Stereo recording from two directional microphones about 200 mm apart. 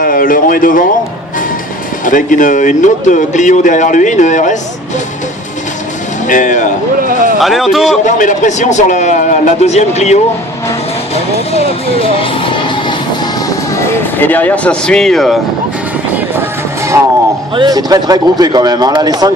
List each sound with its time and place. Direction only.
0.0 s speech: 45° left (ahead or behind)
2.0 s speech: 40° left (ahead or behind)
6.2 s speech: 40° left (ahead or behind)
7.3 s a man's voice: centre (ahead or behind)
8.0 s speech: 40° left (ahead or behind)
13.7 s speech: 10° left (ahead or behind)
16.9 s speech: 10° right (ahead or behind)